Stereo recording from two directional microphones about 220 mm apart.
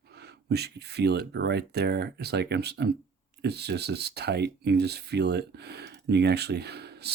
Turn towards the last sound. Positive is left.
turn(degrees=-50)  # may be behind; listen again after turning